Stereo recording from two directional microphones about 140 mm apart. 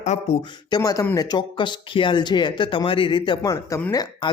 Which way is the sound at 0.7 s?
25° left (ahead or behind).